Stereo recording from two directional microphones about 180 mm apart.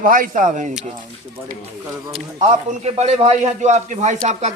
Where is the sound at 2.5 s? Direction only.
40° right (ahead or behind).